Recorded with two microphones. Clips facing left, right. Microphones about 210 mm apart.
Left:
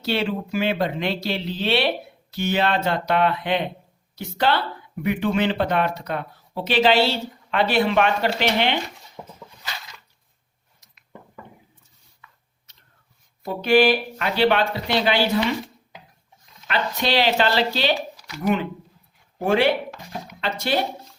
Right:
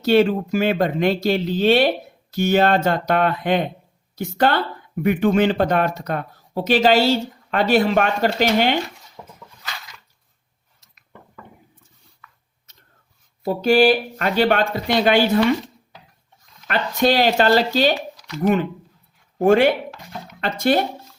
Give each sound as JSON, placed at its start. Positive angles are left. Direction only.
{"t": 0.0, "sound": "speech", "side_deg": -50}
{"t": 9.2, "sound": "dog", "side_deg": 10}
{"t": 13.5, "sound": "speech", "side_deg": -45}
{"t": 16.6, "sound": "speech", "side_deg": -50}